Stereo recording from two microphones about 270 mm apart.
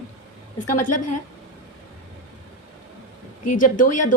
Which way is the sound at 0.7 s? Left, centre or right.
Left.